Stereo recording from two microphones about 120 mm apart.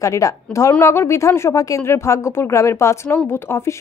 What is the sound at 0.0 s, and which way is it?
A woman's voice, 25° left (ahead or behind).